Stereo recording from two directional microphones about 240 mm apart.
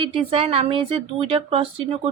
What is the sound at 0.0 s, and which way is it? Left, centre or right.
Speech, right.